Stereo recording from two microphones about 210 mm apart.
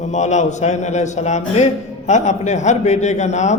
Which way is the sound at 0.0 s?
35° left (ahead or behind).